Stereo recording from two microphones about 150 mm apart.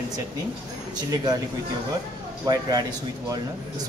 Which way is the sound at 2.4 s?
25° right (ahead or behind).